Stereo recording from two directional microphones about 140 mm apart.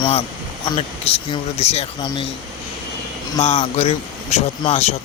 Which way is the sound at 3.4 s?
55° left (ahead or behind).